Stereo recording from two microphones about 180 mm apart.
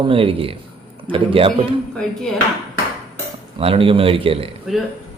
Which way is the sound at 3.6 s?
30° right (ahead or behind).